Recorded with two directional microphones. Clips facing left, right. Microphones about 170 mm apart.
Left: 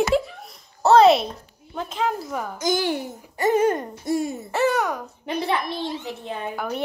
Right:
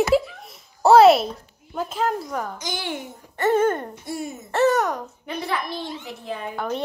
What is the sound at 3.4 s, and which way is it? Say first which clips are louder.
Speech: even; 15° left (ahead or behind).